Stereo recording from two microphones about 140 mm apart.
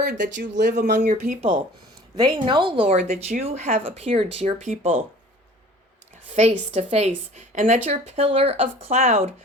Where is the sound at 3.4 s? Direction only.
50° right (ahead or behind).